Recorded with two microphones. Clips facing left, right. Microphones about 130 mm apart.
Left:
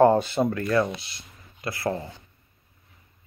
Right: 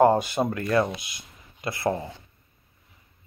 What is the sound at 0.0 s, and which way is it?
Speech, 15° right (ahead or behind).